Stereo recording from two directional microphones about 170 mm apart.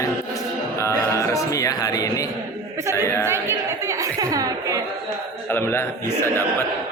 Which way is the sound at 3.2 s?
15° right (ahead or behind).